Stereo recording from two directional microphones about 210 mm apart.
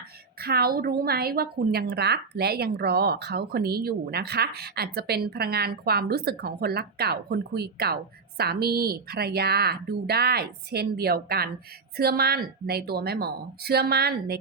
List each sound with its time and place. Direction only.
0.4 s a woman's voice: 45° right (ahead or behind)